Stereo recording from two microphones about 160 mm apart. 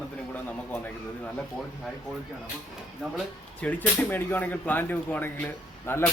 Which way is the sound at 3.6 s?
10° left (ahead or behind).